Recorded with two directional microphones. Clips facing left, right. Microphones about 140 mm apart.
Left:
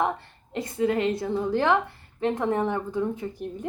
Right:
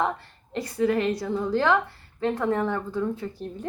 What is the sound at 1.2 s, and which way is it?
A woman's voice, 20° left (ahead or behind).